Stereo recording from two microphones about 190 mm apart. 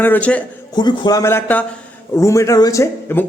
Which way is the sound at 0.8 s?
20° left (ahead or behind).